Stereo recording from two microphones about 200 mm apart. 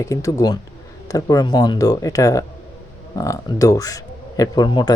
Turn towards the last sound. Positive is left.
turn(degrees=20)  # may be behind; listen again after turning